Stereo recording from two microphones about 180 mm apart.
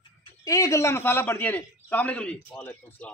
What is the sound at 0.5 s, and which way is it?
A man's voice, 15° left (ahead or behind).